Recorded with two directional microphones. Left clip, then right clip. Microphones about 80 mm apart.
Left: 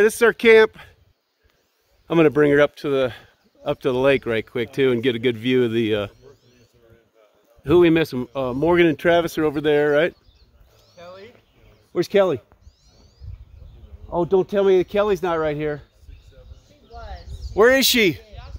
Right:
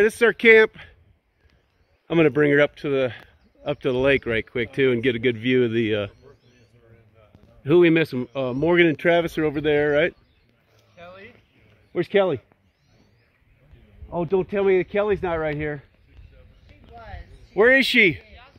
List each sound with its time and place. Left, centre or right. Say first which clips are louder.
0.0 s speech: left 1 dB; left
2.0 s speech: left 2 dB; left
7.6 s speech: left 1 dB; left
11.0 s a sound: left 2 dB; centre
11.9 s speech: left 2 dB; left
14.1 s speech: left 4 dB; left
17.0 s a sound: left 2 dB; centre
17.6 s speech: right 1 dB; left
18.2 s a sound: left 3 dB; centre